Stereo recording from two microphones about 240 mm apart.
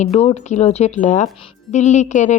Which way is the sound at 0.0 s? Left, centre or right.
Left.